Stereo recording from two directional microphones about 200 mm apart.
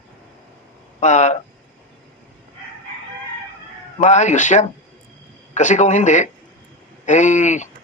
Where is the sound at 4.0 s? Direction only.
35° left (ahead or behind).